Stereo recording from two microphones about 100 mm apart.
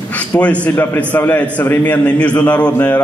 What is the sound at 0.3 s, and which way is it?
A man's voice, 25° left (ahead or behind).